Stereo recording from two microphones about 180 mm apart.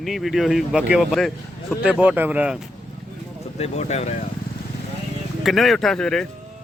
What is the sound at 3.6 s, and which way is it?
Speech, 35° left (ahead or behind).